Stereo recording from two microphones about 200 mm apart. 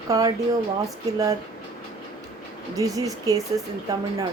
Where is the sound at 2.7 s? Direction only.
15° right (ahead or behind).